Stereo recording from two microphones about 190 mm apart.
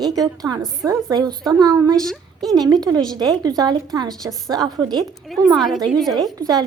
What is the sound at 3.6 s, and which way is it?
A woman's voice, 20° right (ahead or behind).